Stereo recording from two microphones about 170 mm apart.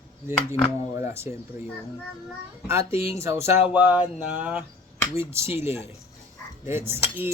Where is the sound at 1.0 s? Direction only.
15° right (ahead or behind).